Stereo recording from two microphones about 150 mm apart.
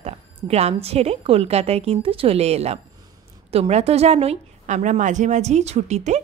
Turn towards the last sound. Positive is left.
turn(degrees=-50)  # may be behind; listen again after turning